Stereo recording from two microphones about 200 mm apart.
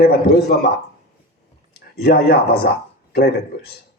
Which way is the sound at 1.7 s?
50° left (ahead or behind).